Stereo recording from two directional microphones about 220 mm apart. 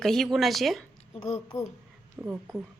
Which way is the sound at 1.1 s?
30° left (ahead or behind).